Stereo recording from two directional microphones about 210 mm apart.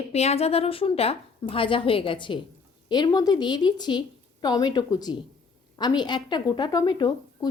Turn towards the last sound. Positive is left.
turn(degrees=20)  # may be behind; listen again after turning